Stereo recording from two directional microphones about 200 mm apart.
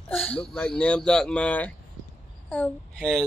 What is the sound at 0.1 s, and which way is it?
A woman's voice, 5° left (ahead or behind).